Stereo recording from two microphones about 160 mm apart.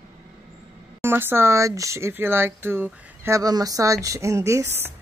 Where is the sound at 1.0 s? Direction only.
15° right (ahead or behind).